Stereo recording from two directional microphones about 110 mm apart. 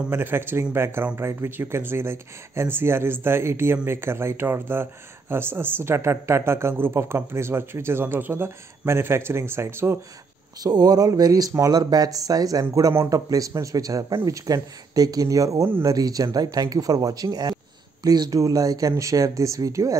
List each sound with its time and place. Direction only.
0.1 s speech: 20° right (ahead or behind)
10.6 s speech: 35° right (ahead or behind)